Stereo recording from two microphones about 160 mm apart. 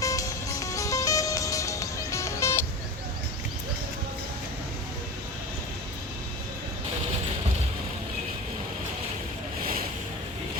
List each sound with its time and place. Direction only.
0.0 s music: 20° left (ahead or behind)